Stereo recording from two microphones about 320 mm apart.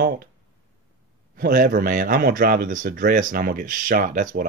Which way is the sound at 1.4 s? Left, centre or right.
Right.